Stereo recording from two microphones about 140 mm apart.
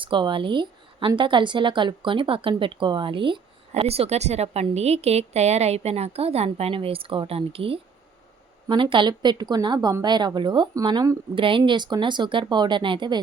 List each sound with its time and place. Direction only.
0.0 s a woman's voice: 35° right (ahead or behind)